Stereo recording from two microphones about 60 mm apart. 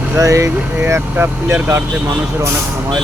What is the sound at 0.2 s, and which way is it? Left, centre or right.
Speech, right.